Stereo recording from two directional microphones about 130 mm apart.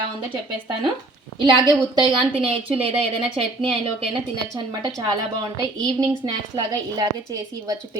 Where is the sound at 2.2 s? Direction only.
45° right (ahead or behind).